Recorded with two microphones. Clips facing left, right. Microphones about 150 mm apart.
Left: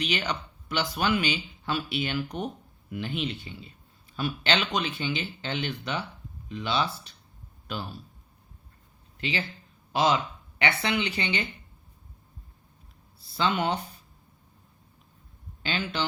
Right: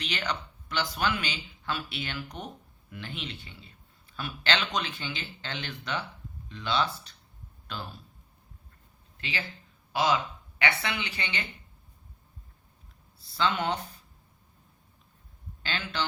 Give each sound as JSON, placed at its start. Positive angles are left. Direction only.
{"t": 0.0, "sound": "speech", "side_deg": 15}
{"t": 9.9, "sound": "speech", "side_deg": 25}
{"t": 13.3, "sound": "speech", "side_deg": 15}
{"t": 15.6, "sound": "speech", "side_deg": 15}